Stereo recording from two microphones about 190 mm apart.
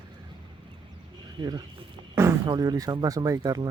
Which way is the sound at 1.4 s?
20° right (ahead or behind).